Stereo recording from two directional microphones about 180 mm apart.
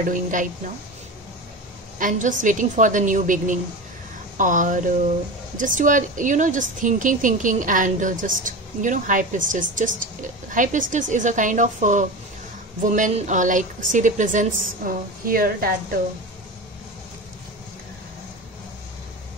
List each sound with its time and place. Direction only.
0.0 s a woman's voice: 45° right (ahead or behind)
2.0 s a woman's voice: 45° right (ahead or behind)